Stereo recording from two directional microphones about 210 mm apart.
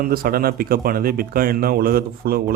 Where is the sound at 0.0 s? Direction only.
45° right (ahead or behind).